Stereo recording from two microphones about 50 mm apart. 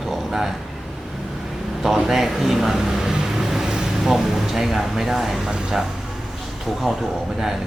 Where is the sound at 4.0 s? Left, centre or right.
Centre.